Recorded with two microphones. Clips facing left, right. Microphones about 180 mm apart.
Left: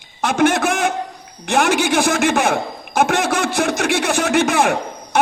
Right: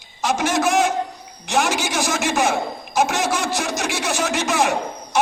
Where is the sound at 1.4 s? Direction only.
60° left (ahead or behind).